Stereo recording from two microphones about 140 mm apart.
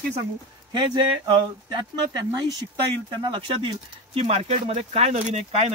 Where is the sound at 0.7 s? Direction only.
35° right (ahead or behind).